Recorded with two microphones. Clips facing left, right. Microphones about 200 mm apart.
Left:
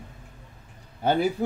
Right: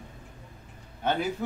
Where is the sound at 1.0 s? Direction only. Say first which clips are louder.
Left 5 dB; 35° left (ahead or behind).